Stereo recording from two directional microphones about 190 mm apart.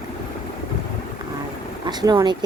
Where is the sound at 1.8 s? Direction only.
20° right (ahead or behind).